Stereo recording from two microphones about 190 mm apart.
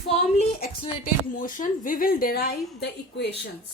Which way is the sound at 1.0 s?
45° left (ahead or behind).